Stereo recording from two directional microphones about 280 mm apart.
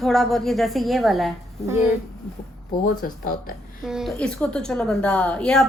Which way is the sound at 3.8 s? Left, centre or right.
Centre.